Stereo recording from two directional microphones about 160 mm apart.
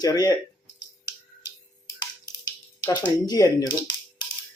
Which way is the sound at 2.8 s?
25° left (ahead or behind).